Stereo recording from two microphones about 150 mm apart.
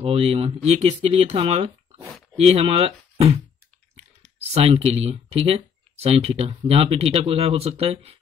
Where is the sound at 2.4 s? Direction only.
40° right (ahead or behind).